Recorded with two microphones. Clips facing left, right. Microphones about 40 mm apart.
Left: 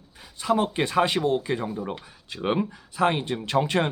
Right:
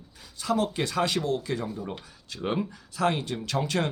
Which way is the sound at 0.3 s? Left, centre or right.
Left.